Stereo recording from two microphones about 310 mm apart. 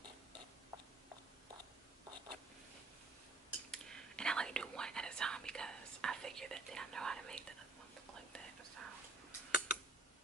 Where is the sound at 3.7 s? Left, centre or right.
Centre.